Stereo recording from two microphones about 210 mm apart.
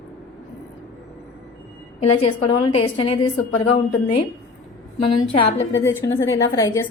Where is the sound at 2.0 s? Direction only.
25° left (ahead or behind).